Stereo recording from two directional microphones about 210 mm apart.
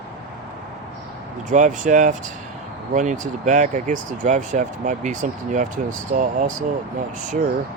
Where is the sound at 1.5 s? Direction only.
35° right (ahead or behind).